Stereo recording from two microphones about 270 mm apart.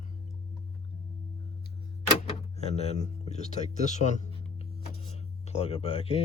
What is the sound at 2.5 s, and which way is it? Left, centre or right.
Speech, left.